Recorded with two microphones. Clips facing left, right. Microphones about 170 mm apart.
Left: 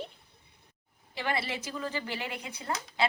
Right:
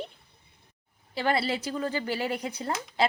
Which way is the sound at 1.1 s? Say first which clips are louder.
Right 6 dB; 35° right (ahead or behind).